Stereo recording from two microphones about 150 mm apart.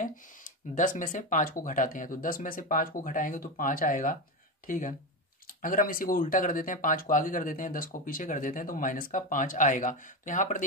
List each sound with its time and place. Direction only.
0.0 s speech: 60° left (ahead or behind)